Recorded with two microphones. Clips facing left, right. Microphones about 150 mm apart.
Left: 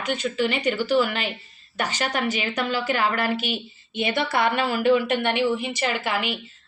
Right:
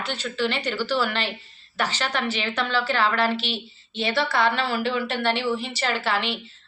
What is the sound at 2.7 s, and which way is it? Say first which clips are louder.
Speech: right 1 dB; 15° left (ahead or behind).